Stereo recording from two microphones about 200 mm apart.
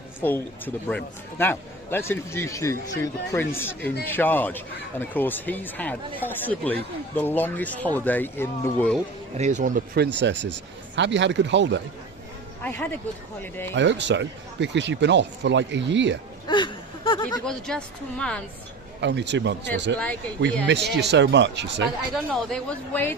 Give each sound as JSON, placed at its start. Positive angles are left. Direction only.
{"t": 0.2, "sound": "a man's voice", "side_deg": 10}
{"t": 9.4, "sound": "speech", "side_deg": -35}
{"t": 12.6, "sound": "a man's voice", "side_deg": 10}
{"t": 13.7, "sound": "speech", "side_deg": -65}
{"t": 16.5, "sound": "a sound", "side_deg": 25}
{"t": 17.4, "sound": "a woman's voice", "side_deg": 5}
{"t": 18.9, "sound": "speech", "side_deg": -60}
{"t": 22.1, "sound": "a woman's voice", "side_deg": 0}